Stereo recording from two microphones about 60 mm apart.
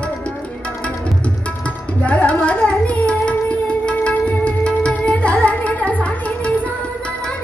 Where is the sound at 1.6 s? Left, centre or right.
Left.